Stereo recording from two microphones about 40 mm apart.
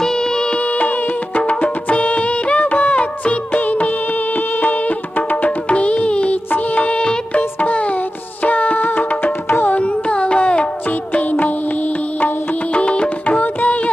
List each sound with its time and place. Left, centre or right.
0.0 s music: centre
0.6 s music: left
5.5 s music: left
7.6 s music: left
8.9 s music: left
9.6 s carnatic music: left
10.8 s music: left
12.7 s music: left
13.2 s music: left